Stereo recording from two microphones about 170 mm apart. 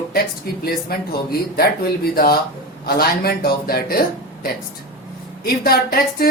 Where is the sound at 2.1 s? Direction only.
60° left (ahead or behind).